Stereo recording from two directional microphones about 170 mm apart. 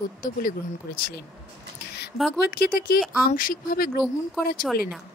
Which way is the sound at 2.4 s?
65° left (ahead or behind).